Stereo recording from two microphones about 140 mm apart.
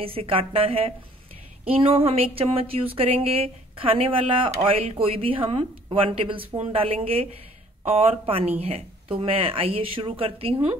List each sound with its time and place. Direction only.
0.0 s speech: 40° right (ahead or behind)